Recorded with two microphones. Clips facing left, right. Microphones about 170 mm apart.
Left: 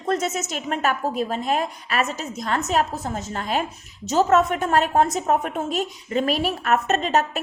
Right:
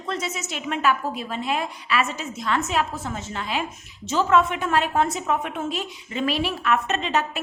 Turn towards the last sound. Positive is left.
turn(degrees=40)  # may be behind; listen again after turning